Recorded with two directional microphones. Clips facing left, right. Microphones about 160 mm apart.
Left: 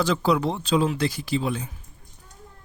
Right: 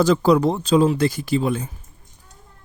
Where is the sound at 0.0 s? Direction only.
45° right (ahead or behind).